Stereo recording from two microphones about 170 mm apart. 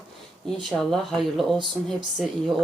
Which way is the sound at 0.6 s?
Centre (ahead or behind).